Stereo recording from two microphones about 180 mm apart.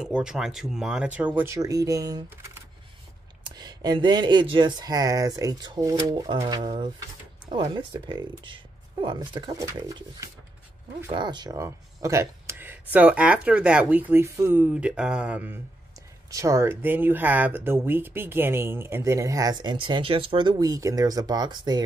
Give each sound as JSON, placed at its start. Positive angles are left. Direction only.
{"t": 0.0, "sound": "speech", "side_deg": -5}